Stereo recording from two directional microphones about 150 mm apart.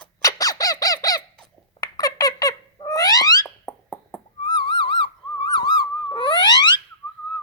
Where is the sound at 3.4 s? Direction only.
5° left (ahead or behind).